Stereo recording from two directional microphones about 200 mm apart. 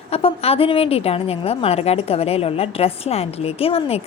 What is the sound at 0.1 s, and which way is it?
A woman's voice, 30° left (ahead or behind).